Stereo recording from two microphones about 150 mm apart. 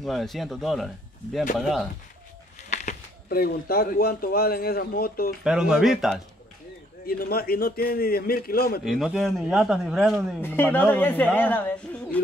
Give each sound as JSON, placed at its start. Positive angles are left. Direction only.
{"t": 0.0, "sound": "speech", "side_deg": 0}
{"t": 2.7, "sound": "a sound", "side_deg": 55}
{"t": 3.3, "sound": "speech", "side_deg": 90}
{"t": 5.4, "sound": "speech", "side_deg": -5}
{"t": 7.1, "sound": "a man's voice", "side_deg": 85}
{"t": 8.8, "sound": "speech", "side_deg": 0}
{"t": 10.4, "sound": "speech", "side_deg": 15}